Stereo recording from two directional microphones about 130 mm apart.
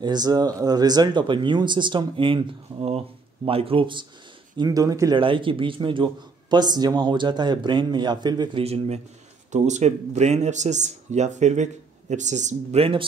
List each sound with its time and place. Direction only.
0.0 s a man's voice: 30° right (ahead or behind)
4.6 s speech: 30° right (ahead or behind)
5.1 s speech: 40° right (ahead or behind)
8.6 s a man's voice: 55° right (ahead or behind)
9.5 s speech: 65° right (ahead or behind)